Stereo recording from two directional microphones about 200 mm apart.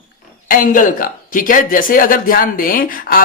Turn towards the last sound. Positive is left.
turn(degrees=45)  # may be behind; listen again after turning